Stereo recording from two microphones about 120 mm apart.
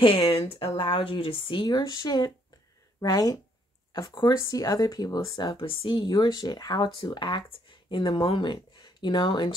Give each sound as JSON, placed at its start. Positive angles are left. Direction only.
{"t": 0.0, "sound": "speech", "side_deg": 50}
{"t": 5.5, "sound": "speech", "side_deg": 50}